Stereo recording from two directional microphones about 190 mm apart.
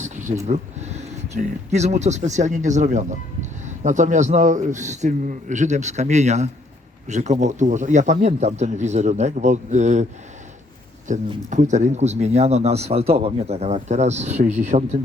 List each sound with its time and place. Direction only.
0.4 s a man's voice: 35° right (ahead or behind)
11.1 s a man's voice: 40° right (ahead or behind)